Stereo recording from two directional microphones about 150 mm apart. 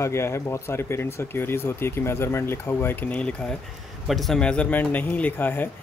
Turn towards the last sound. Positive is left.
turn(degrees=15)  # may be behind; listen again after turning